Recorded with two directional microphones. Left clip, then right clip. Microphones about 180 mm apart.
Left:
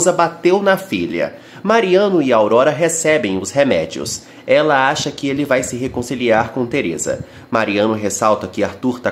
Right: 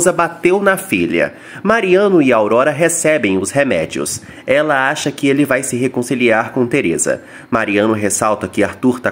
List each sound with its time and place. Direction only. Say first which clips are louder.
0.0 s speech: even; 15° right (ahead or behind)